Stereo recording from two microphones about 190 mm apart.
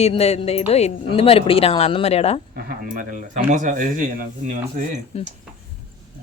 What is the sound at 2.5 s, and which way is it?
Speech, 45° right (ahead or behind).